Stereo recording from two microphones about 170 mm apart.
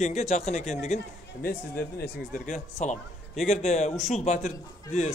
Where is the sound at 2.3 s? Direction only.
45° left (ahead or behind).